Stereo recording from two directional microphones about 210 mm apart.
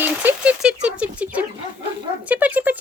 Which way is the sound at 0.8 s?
5° right (ahead or behind).